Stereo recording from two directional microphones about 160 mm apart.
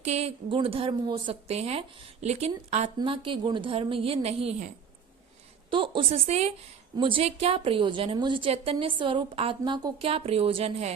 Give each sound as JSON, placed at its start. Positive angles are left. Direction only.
{"t": 0.0, "sound": "a woman's voice", "side_deg": -40}
{"t": 3.0, "sound": "a woman's voice", "side_deg": -30}
{"t": 5.7, "sound": "a woman's voice", "side_deg": -30}